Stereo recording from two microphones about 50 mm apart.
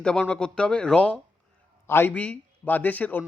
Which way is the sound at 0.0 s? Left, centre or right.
Centre.